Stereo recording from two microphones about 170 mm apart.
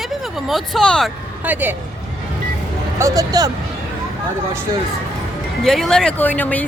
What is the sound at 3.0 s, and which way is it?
Speech, 20° right (ahead or behind).